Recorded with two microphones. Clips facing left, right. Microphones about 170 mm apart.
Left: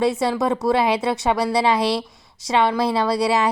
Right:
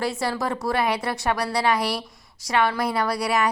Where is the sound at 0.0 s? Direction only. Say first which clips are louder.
Left 6 dB; 20° left (ahead or behind).